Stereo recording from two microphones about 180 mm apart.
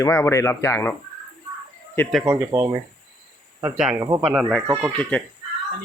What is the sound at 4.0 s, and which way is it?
Speech, 20° right (ahead or behind).